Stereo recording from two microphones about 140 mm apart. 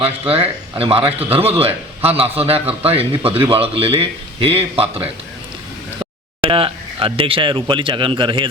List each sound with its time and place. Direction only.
0.0 s a man's voice: 45° right (ahead or behind)
6.4 s speech: 40° right (ahead or behind)